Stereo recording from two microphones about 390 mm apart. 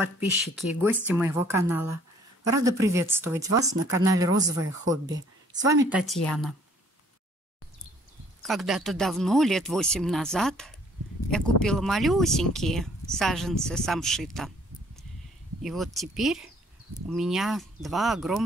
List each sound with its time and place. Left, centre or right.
0.0 s speech: centre
8.4 s speech: centre
15.6 s speech: centre